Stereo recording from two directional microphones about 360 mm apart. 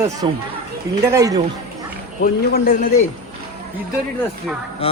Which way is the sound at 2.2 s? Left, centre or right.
Left.